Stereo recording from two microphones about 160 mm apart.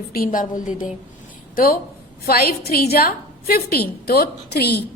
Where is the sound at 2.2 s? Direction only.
70° left (ahead or behind).